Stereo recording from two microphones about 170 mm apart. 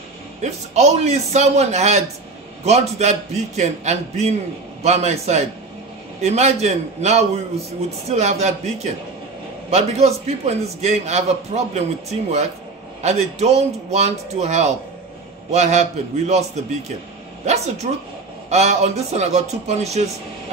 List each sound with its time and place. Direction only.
0.4 s a man's voice: 40° right (ahead or behind)
18.5 s a man's voice: 40° right (ahead or behind)